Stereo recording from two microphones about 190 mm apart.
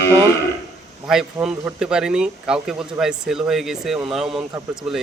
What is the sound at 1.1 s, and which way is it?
A man's voice, centre (ahead or behind).